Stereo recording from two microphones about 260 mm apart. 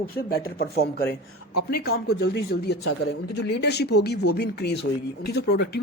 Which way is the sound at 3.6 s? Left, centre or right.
Left.